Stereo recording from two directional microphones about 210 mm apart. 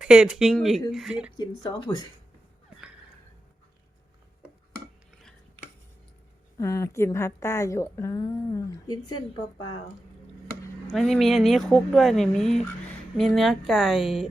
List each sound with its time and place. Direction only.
0.0 s speech: 5° right (ahead or behind)
1.4 s speech: 20° left (ahead or behind)
6.6 s a woman's voice: 15° left (ahead or behind)
10.9 s speech: centre (ahead or behind)